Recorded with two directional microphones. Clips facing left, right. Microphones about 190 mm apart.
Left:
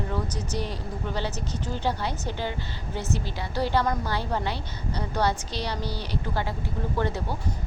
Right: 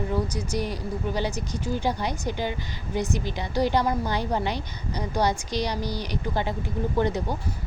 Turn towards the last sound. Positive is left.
turn(degrees=-15)  # may be behind; listen again after turning